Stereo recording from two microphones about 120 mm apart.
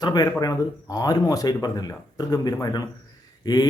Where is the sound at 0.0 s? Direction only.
35° left (ahead or behind).